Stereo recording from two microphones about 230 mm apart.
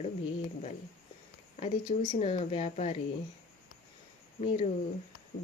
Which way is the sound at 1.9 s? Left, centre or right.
Left.